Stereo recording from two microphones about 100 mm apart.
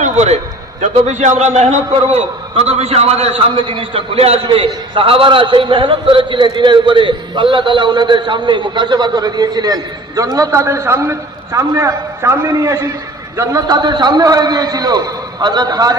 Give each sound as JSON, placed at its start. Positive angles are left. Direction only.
{"t": 1.5, "sound": "a man's voice", "side_deg": -90}
{"t": 4.4, "sound": "a man's voice", "side_deg": -60}